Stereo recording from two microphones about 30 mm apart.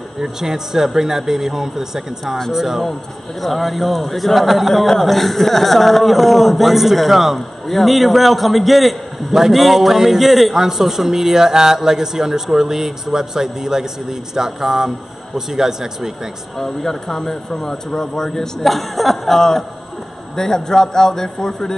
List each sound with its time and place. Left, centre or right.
0.2 s speech: centre
3.3 s a man's voice: centre
9.3 s a man's voice: centre
16.5 s speech: centre
18.6 s a man's voice: centre